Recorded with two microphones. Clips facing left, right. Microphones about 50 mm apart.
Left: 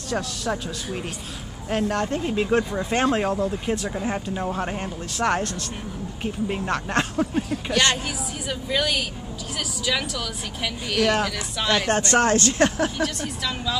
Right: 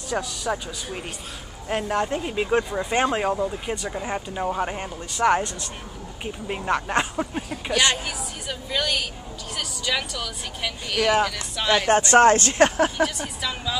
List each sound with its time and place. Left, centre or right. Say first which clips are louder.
0.1 s speech: even; centre
11.9 s speech: right 6 dB; right
12.2 s speech: right 4 dB; right
12.9 s a woman's voice: right 2 dB; centre